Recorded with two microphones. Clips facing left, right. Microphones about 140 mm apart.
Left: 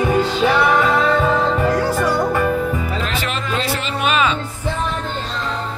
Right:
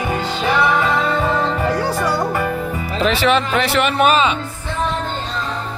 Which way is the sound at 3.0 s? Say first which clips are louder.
Right 8 dB; 85° right.